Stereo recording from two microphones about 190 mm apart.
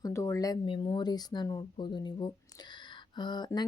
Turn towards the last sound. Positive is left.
turn(degrees=20)  # may be behind; listen again after turning